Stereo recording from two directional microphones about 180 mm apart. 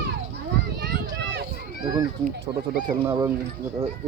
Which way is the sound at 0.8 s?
70° right (ahead or behind).